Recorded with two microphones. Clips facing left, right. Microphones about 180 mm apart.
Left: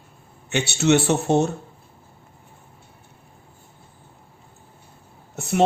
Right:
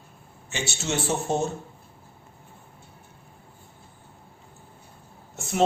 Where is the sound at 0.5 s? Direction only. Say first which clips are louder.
Left 11 dB; 65° left (ahead or behind).